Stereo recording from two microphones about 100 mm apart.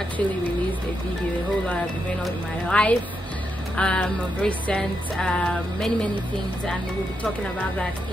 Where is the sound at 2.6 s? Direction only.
10° left (ahead or behind).